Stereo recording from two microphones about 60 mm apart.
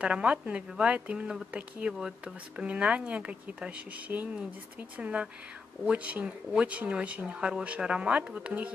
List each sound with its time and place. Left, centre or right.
0.0 s speech: centre
1.9 s speech: centre